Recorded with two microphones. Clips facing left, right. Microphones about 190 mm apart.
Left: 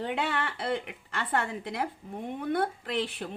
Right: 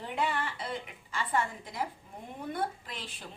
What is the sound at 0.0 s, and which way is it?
A woman's voice, 70° left (ahead or behind).